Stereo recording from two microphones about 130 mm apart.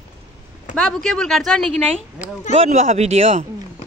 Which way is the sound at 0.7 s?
5° left (ahead or behind).